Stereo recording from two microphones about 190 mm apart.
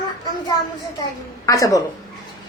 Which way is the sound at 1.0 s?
20° left (ahead or behind).